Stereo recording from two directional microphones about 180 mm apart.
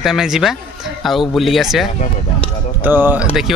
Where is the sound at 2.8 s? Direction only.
10° right (ahead or behind).